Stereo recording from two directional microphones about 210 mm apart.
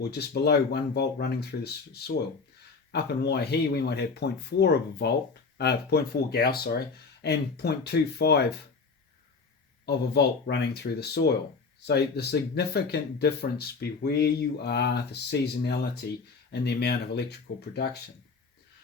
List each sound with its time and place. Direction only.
0.1 s speech: 50° left (ahead or behind)
9.8 s speech: 50° left (ahead or behind)